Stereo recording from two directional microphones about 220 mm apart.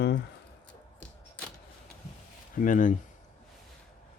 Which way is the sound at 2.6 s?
35° left (ahead or behind).